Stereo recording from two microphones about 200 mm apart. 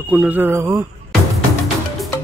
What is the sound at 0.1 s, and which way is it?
Speech, 10° right (ahead or behind).